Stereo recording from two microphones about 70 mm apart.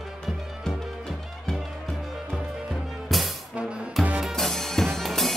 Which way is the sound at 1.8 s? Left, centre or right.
Centre.